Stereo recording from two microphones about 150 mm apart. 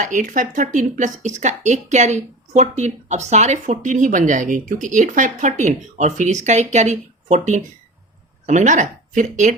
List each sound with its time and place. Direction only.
0.0 s speech: 55° right (ahead or behind)